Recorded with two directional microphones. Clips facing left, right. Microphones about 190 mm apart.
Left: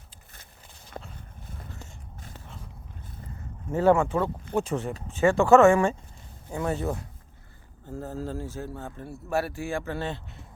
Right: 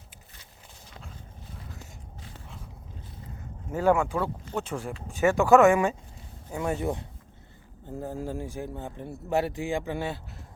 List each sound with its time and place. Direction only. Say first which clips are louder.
0.9 s dog: left 8 dB; 50° left (ahead or behind)
3.7 s speech: left 2 dB; 5° right (ahead or behind)